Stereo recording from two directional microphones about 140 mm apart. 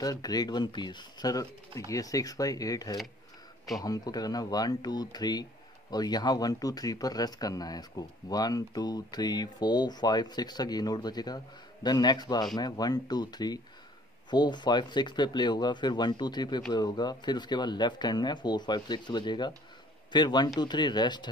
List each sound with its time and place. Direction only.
0.0 s speech: 25° left (ahead or behind)